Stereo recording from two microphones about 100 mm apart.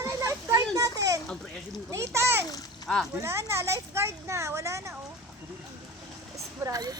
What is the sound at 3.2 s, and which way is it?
A woman's voice, 30° right (ahead or behind).